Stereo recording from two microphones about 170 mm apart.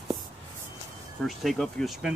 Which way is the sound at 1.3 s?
Centre (ahead or behind).